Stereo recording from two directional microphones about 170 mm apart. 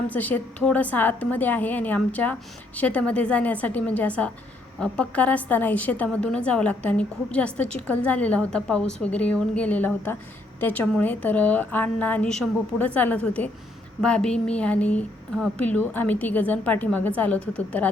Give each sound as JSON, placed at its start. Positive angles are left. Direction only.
{"t": 0.1, "sound": "a woman's voice", "side_deg": 10}